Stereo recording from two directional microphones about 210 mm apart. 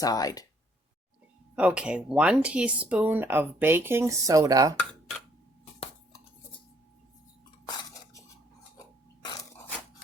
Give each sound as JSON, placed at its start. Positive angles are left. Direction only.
{"t": 0.0, "sound": "speech", "side_deg": 15}
{"t": 1.5, "sound": "speech", "side_deg": -5}